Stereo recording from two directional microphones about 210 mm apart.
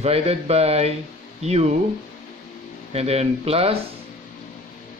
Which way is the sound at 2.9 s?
30° right (ahead or behind).